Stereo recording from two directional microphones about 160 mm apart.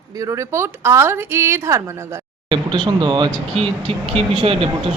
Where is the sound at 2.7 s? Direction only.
30° right (ahead or behind).